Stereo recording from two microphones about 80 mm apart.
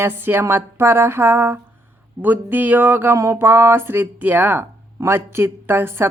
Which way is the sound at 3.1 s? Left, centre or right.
Right.